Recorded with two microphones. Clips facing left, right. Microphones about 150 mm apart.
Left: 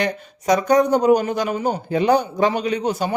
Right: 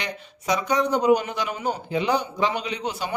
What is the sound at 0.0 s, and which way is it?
A man's voice, 45° left (ahead or behind).